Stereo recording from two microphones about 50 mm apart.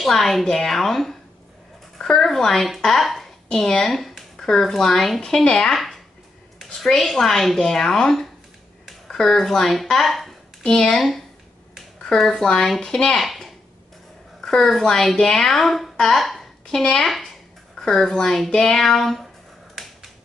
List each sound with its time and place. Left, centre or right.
0.0 s speech: centre
10.6 s speech: centre
13.2 s a sound: centre
14.4 s speech: centre
16.0 s a sound: centre
17.7 s speech: centre